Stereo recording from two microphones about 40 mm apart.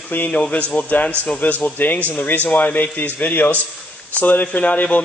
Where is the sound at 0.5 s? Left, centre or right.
Left.